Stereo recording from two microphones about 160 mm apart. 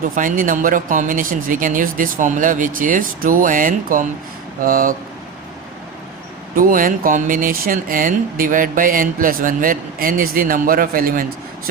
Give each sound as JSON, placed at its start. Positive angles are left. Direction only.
{"t": 0.2, "sound": "speech", "side_deg": -60}
{"t": 6.6, "sound": "speech", "side_deg": -60}